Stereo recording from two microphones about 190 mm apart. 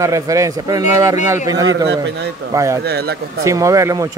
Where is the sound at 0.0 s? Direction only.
15° right (ahead or behind).